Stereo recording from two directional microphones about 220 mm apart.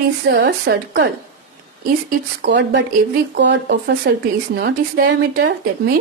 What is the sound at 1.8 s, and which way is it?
Speech, 40° right (ahead or behind).